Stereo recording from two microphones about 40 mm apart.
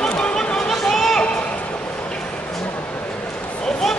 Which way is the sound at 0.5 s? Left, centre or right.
Centre.